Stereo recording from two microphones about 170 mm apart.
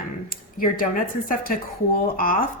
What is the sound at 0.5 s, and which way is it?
Speech, 55° left (ahead or behind).